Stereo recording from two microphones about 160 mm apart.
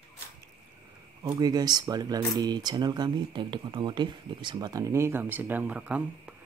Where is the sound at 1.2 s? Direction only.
25° right (ahead or behind).